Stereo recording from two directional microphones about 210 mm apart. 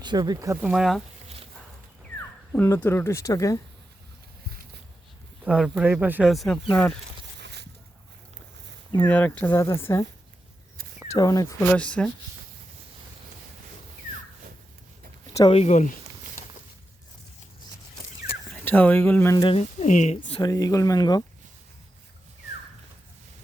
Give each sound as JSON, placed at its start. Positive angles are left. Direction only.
{"t": 0.0, "sound": "speech", "side_deg": -20}
{"t": 2.5, "sound": "speech", "side_deg": 10}
{"t": 5.5, "sound": "speech", "side_deg": -5}
{"t": 7.4, "sound": "a sound", "side_deg": -50}
{"t": 9.0, "sound": "speech", "side_deg": 5}
{"t": 11.1, "sound": "speech", "side_deg": 15}
{"t": 15.3, "sound": "a sound", "side_deg": 15}
{"t": 15.5, "sound": "speech", "side_deg": 30}
{"t": 18.5, "sound": "speech", "side_deg": 10}
{"t": 19.5, "sound": "speech", "side_deg": 35}
{"t": 20.4, "sound": "speech", "side_deg": 15}